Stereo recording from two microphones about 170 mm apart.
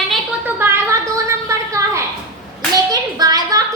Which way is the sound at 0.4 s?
15° right (ahead or behind).